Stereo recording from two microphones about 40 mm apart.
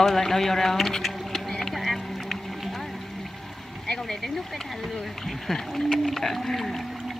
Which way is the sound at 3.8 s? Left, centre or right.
Centre.